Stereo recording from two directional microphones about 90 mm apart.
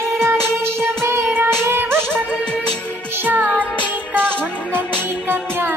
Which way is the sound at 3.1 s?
20° right (ahead or behind).